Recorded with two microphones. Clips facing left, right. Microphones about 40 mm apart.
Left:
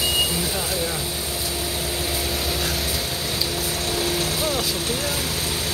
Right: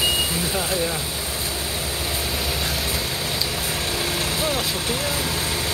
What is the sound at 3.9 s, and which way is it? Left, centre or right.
Vehicle, right.